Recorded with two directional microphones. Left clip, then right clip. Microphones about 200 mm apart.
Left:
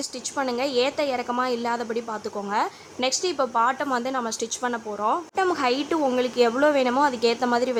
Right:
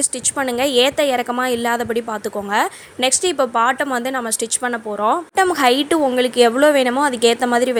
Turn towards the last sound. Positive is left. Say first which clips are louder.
# right 6 dB
turn(degrees=-25)  # may be behind; listen again after turning